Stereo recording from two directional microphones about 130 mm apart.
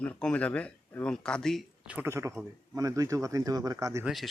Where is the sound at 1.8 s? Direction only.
10° right (ahead or behind).